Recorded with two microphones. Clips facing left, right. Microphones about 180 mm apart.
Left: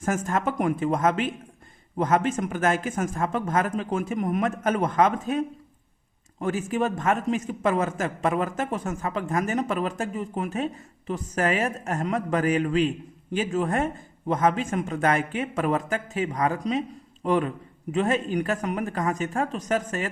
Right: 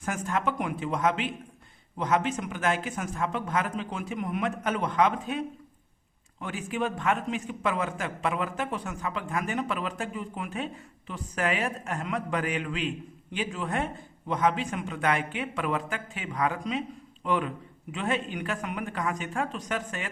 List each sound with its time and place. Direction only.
0.0 s a man's voice: 45° left (ahead or behind)